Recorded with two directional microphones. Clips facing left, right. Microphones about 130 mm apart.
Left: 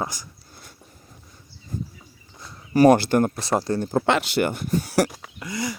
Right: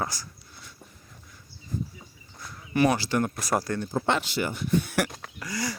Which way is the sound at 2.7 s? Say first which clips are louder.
Left 8 dB; 50° left (ahead or behind).